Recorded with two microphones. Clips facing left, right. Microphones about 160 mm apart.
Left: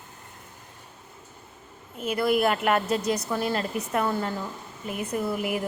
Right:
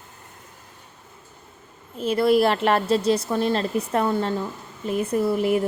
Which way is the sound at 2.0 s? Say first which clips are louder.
Right 5 dB; 30° right (ahead or behind).